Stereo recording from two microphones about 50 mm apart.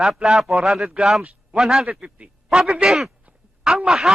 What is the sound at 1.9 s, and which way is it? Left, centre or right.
A man's voice, right.